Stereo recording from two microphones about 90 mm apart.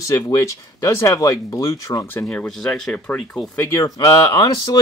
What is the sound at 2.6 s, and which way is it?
Speech, 5° left (ahead or behind).